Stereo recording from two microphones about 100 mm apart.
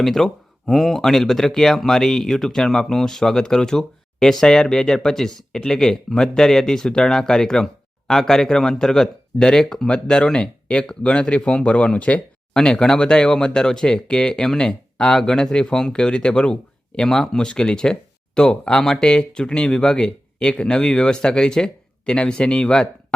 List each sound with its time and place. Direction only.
0.0 s speech: 5° left (ahead or behind)